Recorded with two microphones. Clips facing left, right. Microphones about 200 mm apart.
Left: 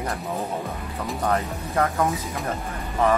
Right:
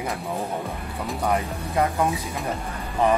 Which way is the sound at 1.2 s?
15° right (ahead or behind).